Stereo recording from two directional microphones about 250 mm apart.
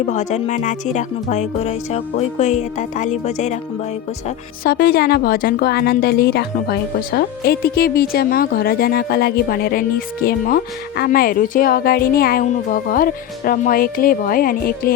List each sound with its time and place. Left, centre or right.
0.0 s music: left
4.6 s a woman's voice: left